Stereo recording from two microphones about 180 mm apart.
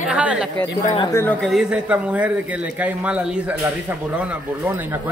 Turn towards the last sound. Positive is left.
turn(degrees=-10)  # may be behind; listen again after turning